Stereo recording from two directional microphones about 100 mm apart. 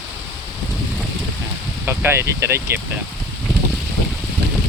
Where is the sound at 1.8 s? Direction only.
25° right (ahead or behind).